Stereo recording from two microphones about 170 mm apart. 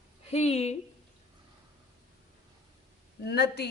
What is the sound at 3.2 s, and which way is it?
Speech, 75° left (ahead or behind).